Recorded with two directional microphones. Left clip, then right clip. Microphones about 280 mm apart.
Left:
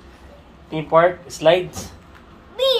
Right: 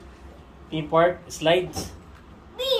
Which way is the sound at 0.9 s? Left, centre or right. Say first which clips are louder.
Left 5 dB; centre.